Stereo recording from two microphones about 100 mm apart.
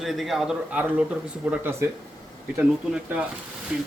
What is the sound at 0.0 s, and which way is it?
Speech, centre (ahead or behind).